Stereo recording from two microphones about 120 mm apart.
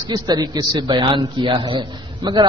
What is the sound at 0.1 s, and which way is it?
A man's voice, 35° right (ahead or behind).